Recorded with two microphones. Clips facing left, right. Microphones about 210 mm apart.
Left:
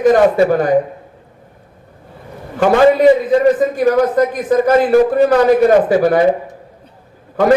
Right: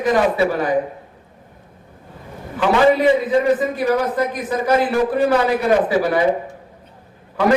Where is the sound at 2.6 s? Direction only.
50° left (ahead or behind).